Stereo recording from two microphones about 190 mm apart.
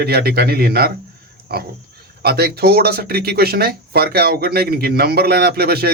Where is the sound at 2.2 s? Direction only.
55° right (ahead or behind).